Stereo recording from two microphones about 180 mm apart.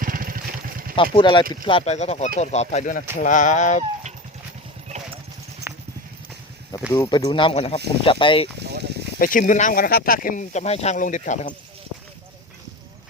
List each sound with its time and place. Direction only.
0.0 s vehicle: 50° right (ahead or behind)
0.9 s speech: 25° left (ahead or behind); by 3.8 s 45° left (ahead or behind)
5.7 s clip-clop: 10° right (ahead or behind)
6.9 s speech: 20° left (ahead or behind)
8.5 s a sound: 70° right (ahead or behind)
9.1 s speech: 50° left (ahead or behind)